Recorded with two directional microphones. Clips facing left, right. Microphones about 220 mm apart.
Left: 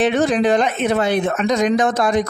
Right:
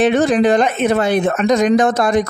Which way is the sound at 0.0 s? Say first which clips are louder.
Right 3 dB; 50° right (ahead or behind).